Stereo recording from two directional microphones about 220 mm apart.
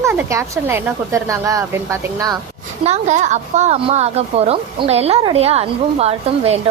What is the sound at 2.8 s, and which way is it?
A woman's voice, 30° right (ahead or behind).